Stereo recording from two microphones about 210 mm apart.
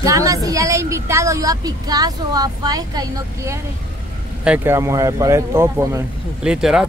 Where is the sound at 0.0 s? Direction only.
15° right (ahead or behind).